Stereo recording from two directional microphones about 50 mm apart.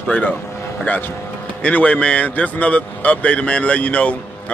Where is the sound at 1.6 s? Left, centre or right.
Left.